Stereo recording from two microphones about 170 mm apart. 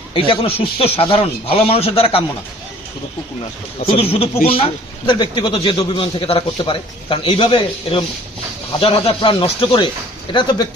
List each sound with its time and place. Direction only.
0.1 s a man's voice: 35° left (ahead or behind)
3.8 s a man's voice: 35° left (ahead or behind)